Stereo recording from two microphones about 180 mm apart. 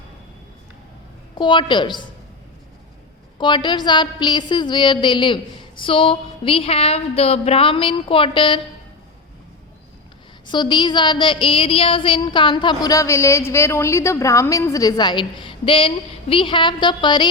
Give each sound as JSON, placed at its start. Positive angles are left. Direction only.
{"t": 1.4, "sound": "a woman's voice", "side_deg": 25}
{"t": 3.3, "sound": "a woman's voice", "side_deg": 25}
{"t": 10.4, "sound": "a woman's voice", "side_deg": 25}